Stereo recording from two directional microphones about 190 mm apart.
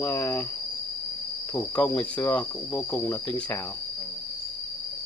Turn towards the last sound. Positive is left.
turn(degrees=10)  # may be behind; listen again after turning